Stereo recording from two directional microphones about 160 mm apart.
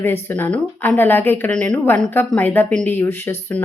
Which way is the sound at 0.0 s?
15° left (ahead or behind).